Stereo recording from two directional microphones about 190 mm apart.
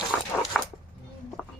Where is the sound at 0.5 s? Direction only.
Centre (ahead or behind).